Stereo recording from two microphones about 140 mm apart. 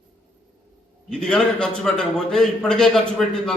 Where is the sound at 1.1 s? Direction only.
5° left (ahead or behind).